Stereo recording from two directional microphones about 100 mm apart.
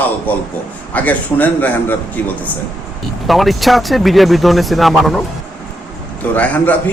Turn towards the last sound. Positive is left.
turn(degrees=15)  # may be behind; listen again after turning